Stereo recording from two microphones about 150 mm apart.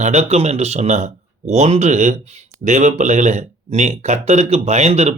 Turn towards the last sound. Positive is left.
turn(degrees=-45)  # may be behind; listen again after turning